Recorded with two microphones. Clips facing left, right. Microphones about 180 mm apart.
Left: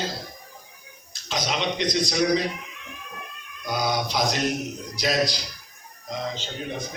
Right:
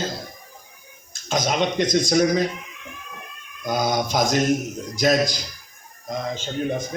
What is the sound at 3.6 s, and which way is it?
Mantra, 50° right (ahead or behind).